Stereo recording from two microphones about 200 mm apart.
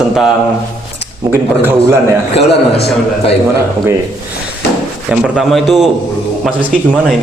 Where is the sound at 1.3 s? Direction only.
10° right (ahead or behind).